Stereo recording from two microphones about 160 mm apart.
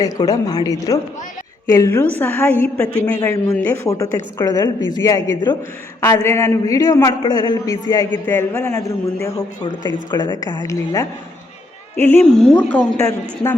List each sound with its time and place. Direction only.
0.0 s a man's voice: 25° left (ahead or behind)
11.9 s a woman's voice: 10° left (ahead or behind)